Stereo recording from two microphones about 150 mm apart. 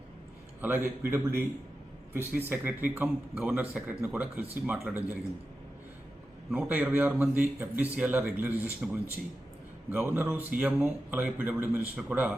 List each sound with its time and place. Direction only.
0.6 s a man's voice: 15° right (ahead or behind)
6.5 s a man's voice: 10° right (ahead or behind)